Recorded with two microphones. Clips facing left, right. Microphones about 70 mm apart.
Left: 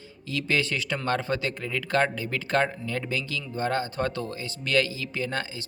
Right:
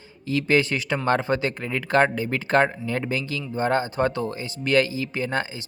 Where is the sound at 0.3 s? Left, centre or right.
Right.